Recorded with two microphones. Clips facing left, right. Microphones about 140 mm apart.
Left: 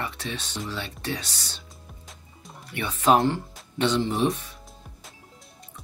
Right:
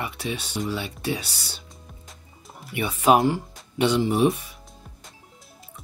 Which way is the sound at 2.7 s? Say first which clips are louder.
Right 2 dB; 10° right (ahead or behind).